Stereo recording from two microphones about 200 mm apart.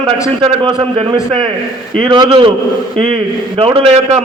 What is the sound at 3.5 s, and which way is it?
Speech, 25° right (ahead or behind).